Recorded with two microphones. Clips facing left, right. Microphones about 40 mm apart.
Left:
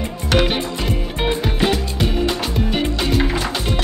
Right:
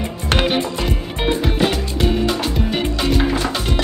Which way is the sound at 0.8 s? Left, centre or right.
Centre.